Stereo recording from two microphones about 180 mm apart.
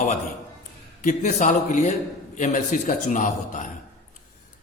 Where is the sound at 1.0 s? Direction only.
45° left (ahead or behind).